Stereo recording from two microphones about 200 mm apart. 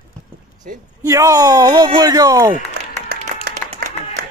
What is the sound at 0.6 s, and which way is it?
Speech, 45° right (ahead or behind).